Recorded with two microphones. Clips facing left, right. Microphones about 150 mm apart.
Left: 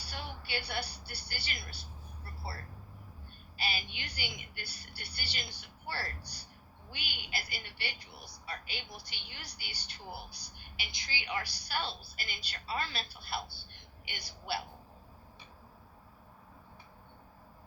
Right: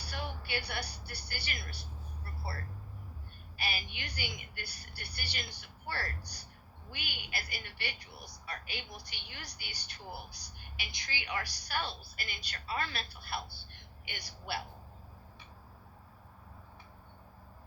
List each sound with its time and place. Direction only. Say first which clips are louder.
0.1 s speech: right 2 dB; 30° left (ahead or behind)
3.6 s a woman's voice: left 1 dB; 25° left (ahead or behind)